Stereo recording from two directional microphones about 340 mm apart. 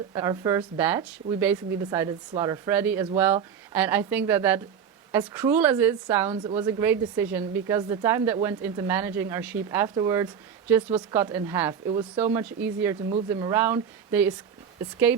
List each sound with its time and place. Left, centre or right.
0.1 s a woman's voice: centre
6.3 s speech: centre